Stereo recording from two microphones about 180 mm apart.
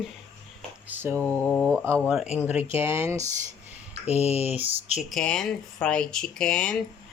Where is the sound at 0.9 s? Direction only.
10° right (ahead or behind).